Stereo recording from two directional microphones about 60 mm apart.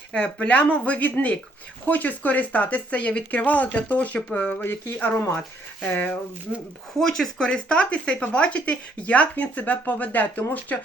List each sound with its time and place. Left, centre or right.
0.1 s speech: left
4.6 s speech: left
7.0 s speech: centre; by 10.8 s left